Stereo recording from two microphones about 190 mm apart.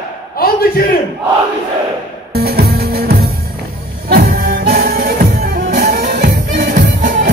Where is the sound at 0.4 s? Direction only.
55° left (ahead or behind).